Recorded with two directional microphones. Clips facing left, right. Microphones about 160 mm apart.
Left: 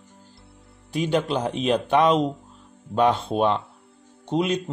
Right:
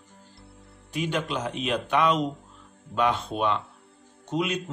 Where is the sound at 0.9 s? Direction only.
35° left (ahead or behind).